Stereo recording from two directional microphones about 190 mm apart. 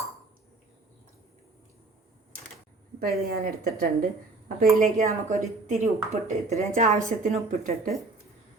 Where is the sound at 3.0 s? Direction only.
50° right (ahead or behind).